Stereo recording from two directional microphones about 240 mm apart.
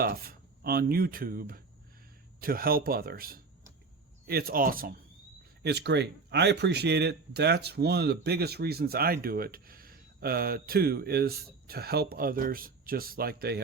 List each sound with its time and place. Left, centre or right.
0.0 s speech: right